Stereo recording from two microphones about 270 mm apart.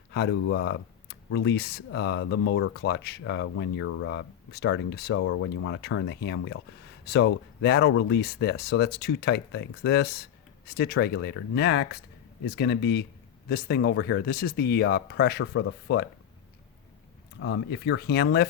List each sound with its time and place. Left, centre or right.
0.1 s speech: left
17.4 s speech: left